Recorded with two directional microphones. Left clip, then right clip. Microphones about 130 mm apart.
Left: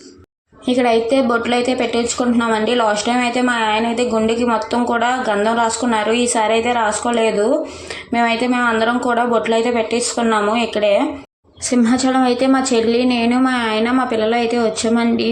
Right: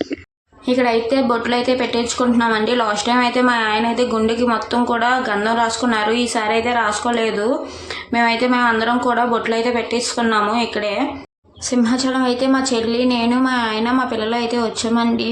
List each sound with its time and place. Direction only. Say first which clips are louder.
0.7 s a woman's voice: left 2 dB; 30° left (ahead or behind)